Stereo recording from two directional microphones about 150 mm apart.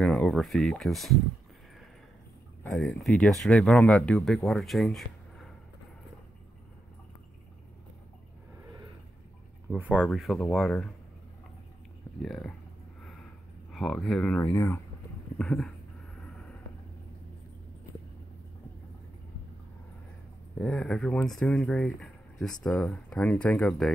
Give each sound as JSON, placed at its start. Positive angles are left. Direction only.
{"t": 0.0, "sound": "speech", "side_deg": 5}
{"t": 2.6, "sound": "speech", "side_deg": 10}
{"t": 9.7, "sound": "speech", "side_deg": -10}
{"t": 12.2, "sound": "speech", "side_deg": 5}
{"t": 13.7, "sound": "speech", "side_deg": 0}
{"t": 20.5, "sound": "speech", "side_deg": 5}